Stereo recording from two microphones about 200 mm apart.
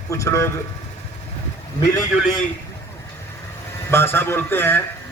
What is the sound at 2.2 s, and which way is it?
Speech, centre (ahead or behind).